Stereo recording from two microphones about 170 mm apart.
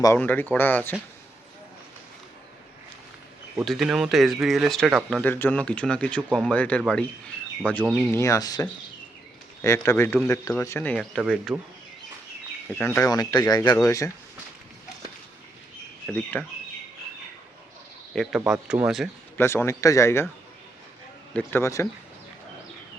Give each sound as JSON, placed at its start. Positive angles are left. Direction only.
{"t": 0.2, "sound": "speech", "side_deg": 10}
{"t": 3.6, "sound": "speech", "side_deg": 0}
{"t": 11.2, "sound": "speech", "side_deg": -5}
{"t": 12.8, "sound": "speech", "side_deg": 15}
{"t": 16.0, "sound": "speech", "side_deg": 5}
{"t": 18.1, "sound": "speech", "side_deg": 0}
{"t": 19.4, "sound": "speech", "side_deg": 15}
{"t": 21.3, "sound": "speech", "side_deg": 15}